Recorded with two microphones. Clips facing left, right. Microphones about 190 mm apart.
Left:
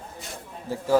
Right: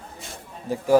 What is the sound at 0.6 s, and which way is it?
Speech, 15° right (ahead or behind).